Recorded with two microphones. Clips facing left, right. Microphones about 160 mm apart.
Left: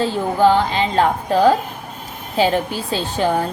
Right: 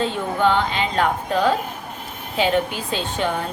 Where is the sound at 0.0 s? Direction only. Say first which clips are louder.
Left 5 dB; 35° left (ahead or behind).